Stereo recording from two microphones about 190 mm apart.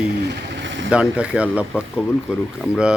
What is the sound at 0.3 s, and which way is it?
Vehicle, 70° right (ahead or behind).